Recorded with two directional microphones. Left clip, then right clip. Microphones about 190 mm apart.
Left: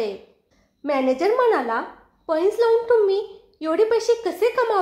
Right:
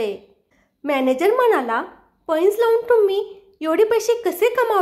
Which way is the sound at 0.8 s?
40° right (ahead or behind).